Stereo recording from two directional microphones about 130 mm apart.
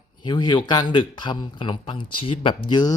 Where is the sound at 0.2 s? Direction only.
35° left (ahead or behind).